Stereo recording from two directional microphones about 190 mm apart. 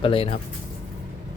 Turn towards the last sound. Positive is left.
turn(degrees=30)  # may be behind; listen again after turning